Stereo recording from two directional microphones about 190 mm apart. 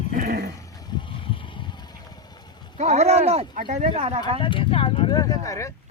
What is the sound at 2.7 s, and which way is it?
Speech, 40° right (ahead or behind).